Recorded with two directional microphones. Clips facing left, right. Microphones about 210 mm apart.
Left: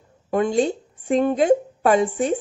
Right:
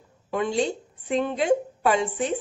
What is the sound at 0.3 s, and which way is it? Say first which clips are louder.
A woman's voice: left 5 dB; 50° left (ahead or behind).